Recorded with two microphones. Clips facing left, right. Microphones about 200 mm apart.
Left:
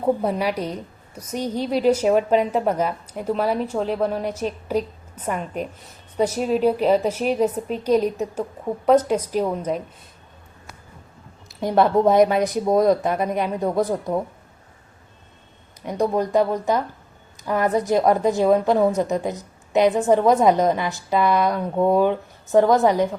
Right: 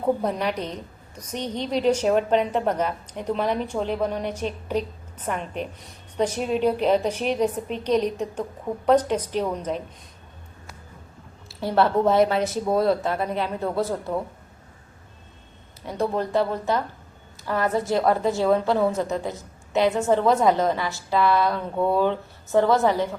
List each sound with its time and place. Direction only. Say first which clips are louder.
0.0 s a woman's voice: left 2 dB; 10° left (ahead or behind)
11.4 s a woman's voice: left 3 dB; 15° left (ahead or behind)
15.8 s a woman's voice: left 4 dB; 15° left (ahead or behind)